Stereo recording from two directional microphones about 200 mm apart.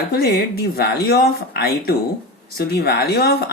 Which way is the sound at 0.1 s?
50° left (ahead or behind).